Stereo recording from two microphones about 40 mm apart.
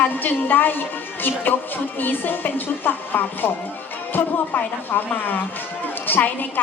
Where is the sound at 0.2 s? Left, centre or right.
Left.